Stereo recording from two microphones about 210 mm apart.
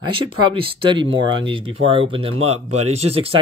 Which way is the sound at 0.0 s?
25° right (ahead or behind).